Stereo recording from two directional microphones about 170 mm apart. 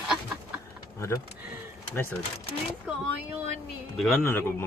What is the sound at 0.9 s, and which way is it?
Speech, 15° left (ahead or behind).